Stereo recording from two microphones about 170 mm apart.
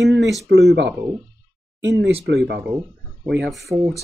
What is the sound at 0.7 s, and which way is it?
Speech, 80° right.